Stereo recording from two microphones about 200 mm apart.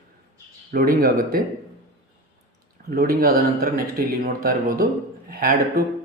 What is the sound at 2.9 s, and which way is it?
Speech, 50° right (ahead or behind).